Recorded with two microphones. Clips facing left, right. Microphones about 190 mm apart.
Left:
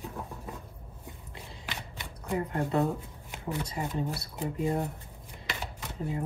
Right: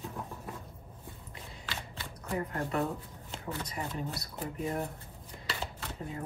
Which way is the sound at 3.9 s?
15° left (ahead or behind).